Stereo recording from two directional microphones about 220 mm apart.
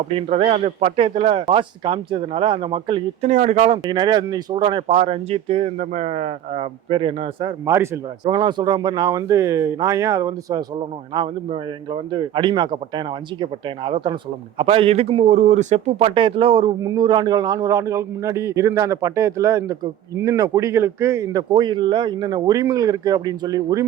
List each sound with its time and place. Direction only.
0.2 s speech: 25° right (ahead or behind)
3.8 s a man's voice: 20° right (ahead or behind)